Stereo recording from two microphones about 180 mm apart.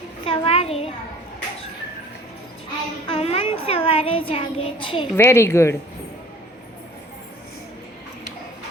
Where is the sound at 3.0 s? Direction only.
30° left (ahead or behind).